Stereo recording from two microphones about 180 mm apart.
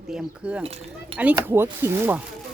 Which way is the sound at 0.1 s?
5° right (ahead or behind).